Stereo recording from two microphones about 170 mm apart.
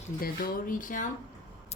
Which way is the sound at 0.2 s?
60° left (ahead or behind).